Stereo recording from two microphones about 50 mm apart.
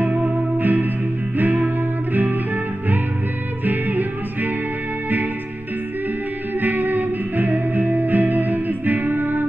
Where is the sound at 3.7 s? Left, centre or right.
Right.